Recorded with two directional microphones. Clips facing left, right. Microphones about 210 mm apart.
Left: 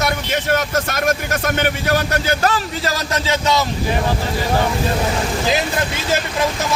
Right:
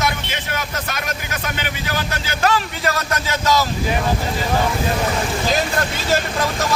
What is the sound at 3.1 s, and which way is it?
Speech, 25° left (ahead or behind).